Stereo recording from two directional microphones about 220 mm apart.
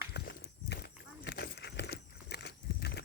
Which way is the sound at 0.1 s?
50° left (ahead or behind).